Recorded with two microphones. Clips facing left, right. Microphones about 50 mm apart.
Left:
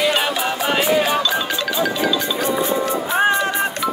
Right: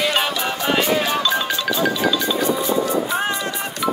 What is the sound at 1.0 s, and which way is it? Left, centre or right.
Music, centre.